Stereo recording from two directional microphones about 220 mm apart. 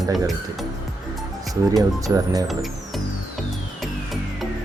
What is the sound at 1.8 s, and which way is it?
Speech, 15° right (ahead or behind).